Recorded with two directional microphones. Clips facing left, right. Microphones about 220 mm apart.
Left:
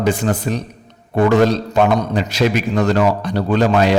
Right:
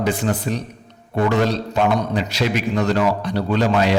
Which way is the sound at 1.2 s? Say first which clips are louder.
Left 5 dB; 45° left (ahead or behind).